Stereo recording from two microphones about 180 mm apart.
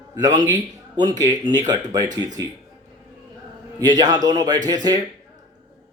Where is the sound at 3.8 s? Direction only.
20° right (ahead or behind).